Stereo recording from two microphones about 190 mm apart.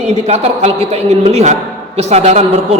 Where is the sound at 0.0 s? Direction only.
35° right (ahead or behind).